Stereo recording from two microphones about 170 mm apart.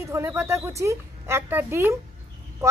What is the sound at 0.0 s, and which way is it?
A woman's voice, 15° right (ahead or behind).